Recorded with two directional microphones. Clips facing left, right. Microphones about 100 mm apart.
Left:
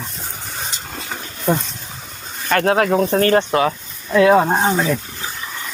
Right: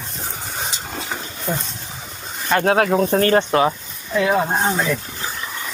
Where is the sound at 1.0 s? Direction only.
5° right (ahead or behind).